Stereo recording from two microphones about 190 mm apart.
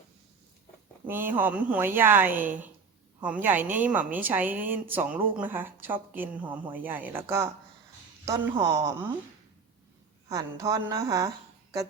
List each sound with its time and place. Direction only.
1.0 s a woman's voice: 10° right (ahead or behind)
10.2 s a woman's voice: 15° right (ahead or behind)